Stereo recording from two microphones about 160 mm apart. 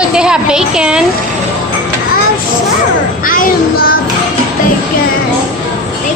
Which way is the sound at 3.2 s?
60° left (ahead or behind).